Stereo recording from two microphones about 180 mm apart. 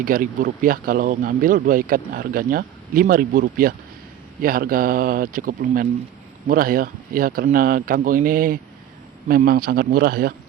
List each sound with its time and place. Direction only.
0.0 s speech: 50° right (ahead or behind)